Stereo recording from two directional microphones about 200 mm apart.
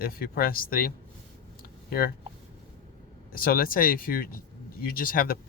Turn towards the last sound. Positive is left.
turn(degrees=45)  # may be behind; listen again after turning